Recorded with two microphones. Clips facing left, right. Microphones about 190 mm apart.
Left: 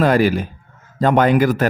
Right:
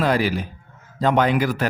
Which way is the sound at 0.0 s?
50° left (ahead or behind).